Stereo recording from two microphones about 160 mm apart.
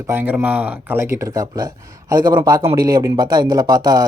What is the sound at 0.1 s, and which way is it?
Speech, 10° right (ahead or behind).